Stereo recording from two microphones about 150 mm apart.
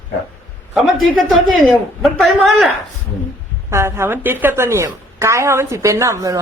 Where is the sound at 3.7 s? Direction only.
20° right (ahead or behind).